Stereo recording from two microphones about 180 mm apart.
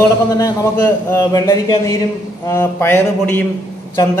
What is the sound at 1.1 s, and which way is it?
A man's voice, 15° left (ahead or behind).